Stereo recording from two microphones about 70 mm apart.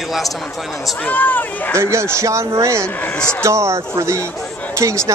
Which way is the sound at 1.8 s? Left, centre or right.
Right.